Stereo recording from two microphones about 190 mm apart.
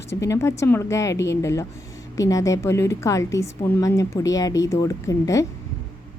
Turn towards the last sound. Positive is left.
turn(degrees=15)  # may be behind; listen again after turning